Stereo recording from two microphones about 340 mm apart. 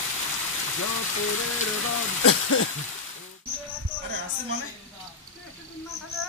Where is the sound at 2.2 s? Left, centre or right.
Left.